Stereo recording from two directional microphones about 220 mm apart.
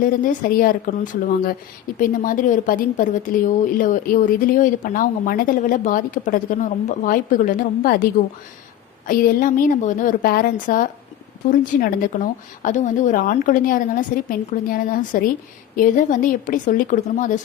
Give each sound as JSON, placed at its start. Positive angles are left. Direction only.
{"t": 0.0, "sound": "a woman's voice", "side_deg": 35}